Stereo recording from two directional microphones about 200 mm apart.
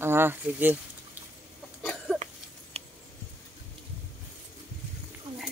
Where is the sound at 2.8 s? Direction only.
30° right (ahead or behind).